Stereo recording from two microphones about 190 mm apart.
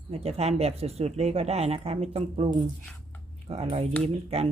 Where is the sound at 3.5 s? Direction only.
30° right (ahead or behind).